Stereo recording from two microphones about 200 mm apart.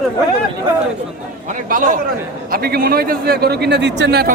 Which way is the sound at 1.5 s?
40° right (ahead or behind).